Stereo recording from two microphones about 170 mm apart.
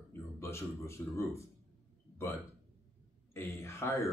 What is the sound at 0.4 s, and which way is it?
Speech, 15° left (ahead or behind).